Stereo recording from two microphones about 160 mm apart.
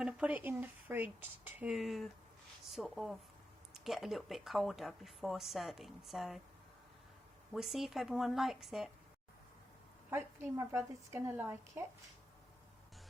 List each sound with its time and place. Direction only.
0.0 s speech: 10° right (ahead or behind)
7.5 s speech: centre (ahead or behind)
10.1 s speech: 15° right (ahead or behind)